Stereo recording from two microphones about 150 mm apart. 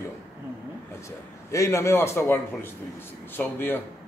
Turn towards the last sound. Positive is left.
turn(degrees=15)  # may be behind; listen again after turning